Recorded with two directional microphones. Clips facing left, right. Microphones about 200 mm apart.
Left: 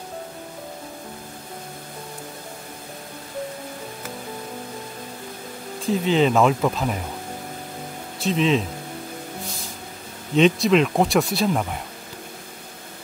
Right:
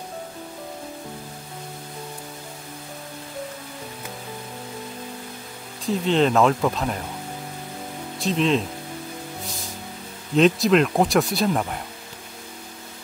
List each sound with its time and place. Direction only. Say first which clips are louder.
5.9 s speech: left 1 dB; centre (ahead or behind)
8.2 s speech: left 1 dB; centre (ahead or behind)
10.3 s speech: even; centre (ahead or behind)